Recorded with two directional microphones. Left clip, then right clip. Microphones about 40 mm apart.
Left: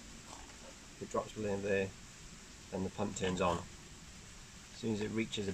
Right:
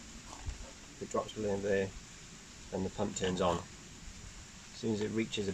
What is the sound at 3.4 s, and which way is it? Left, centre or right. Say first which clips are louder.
Speech: right 2 dB; centre.